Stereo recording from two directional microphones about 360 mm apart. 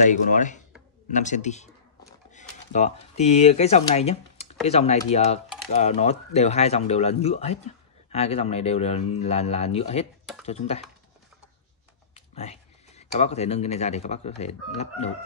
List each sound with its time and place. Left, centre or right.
0.0 s a man's voice: left
12.1 s speech: centre